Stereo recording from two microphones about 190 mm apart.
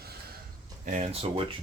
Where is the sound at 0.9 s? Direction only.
35° right (ahead or behind).